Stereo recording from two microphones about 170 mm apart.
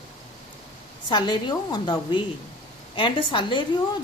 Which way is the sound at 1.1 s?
25° left (ahead or behind).